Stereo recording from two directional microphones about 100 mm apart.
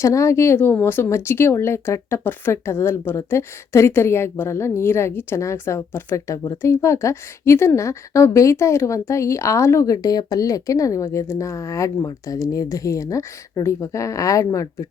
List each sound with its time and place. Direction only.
0.0 s a woman's voice: 30° left (ahead or behind)